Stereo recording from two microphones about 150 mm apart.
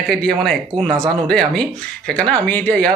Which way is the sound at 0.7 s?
35° right (ahead or behind).